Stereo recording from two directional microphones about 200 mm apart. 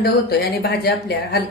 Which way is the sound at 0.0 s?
55° left (ahead or behind).